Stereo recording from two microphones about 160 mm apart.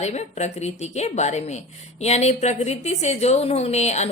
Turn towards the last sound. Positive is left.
turn(degrees=45)  # may be behind; listen again after turning